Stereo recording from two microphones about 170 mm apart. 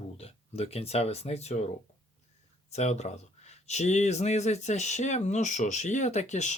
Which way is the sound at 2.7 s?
40° left (ahead or behind).